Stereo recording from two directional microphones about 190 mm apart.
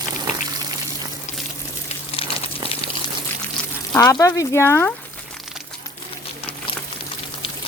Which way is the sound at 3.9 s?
20° left (ahead or behind).